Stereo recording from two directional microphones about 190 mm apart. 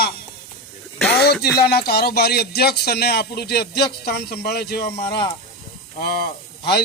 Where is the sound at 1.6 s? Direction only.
55° left (ahead or behind).